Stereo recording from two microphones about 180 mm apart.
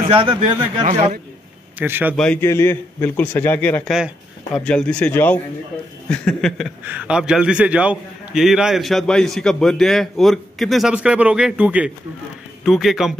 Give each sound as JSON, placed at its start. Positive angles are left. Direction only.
{"t": 0.1, "sound": "speech", "side_deg": -25}
{"t": 0.8, "sound": "a man's voice", "side_deg": -40}
{"t": 1.8, "sound": "speech", "side_deg": -10}
{"t": 2.1, "sound": "a man's voice", "side_deg": 10}
{"t": 6.8, "sound": "a man's voice", "side_deg": -10}